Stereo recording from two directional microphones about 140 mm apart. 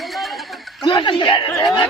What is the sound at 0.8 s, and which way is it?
Speech, 35° left (ahead or behind).